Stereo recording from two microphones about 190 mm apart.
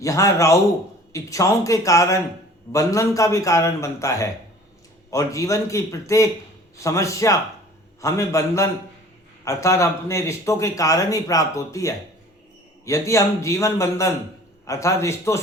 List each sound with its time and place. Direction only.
0.0 s speech: 15° left (ahead or behind)